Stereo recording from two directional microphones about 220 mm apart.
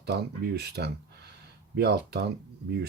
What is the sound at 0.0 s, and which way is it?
Speech, 45° right (ahead or behind).